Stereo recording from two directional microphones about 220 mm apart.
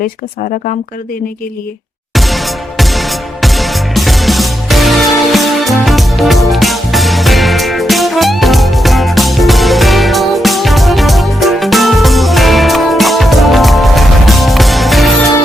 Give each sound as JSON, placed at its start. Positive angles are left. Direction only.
{"t": 2.1, "sound": "music", "side_deg": 0}